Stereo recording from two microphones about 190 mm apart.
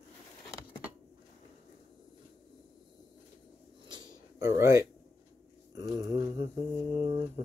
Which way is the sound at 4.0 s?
15° right (ahead or behind).